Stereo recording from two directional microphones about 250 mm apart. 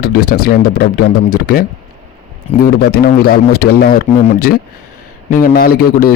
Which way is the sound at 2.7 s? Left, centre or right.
Left.